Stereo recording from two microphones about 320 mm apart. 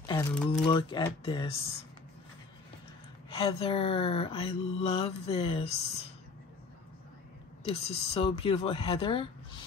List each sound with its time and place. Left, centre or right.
0.0 s speech: centre
0.7 s mantra: centre
3.3 s mantra: centre
7.6 s mantra: centre